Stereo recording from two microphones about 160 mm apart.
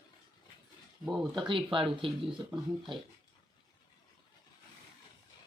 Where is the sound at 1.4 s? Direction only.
30° right (ahead or behind).